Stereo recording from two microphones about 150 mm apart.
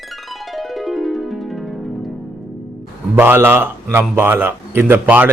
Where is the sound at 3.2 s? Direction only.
15° right (ahead or behind).